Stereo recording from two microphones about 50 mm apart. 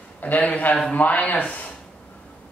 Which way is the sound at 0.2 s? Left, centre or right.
Left.